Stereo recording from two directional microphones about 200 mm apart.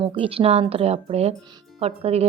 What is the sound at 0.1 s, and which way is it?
A woman's voice, 30° right (ahead or behind).